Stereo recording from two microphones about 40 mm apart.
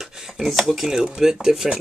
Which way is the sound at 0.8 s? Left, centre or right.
Centre.